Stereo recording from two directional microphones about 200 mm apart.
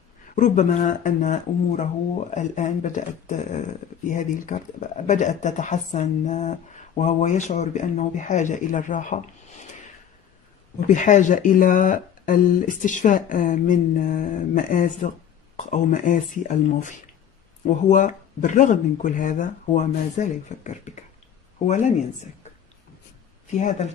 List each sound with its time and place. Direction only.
0.4 s speech: 40° left (ahead or behind)
10.9 s speech: 40° left (ahead or behind)